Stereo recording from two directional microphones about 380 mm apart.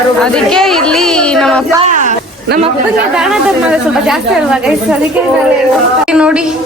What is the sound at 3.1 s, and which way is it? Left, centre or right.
A woman's voice, centre.